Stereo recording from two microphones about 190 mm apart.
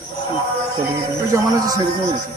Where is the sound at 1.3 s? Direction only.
20° right (ahead or behind).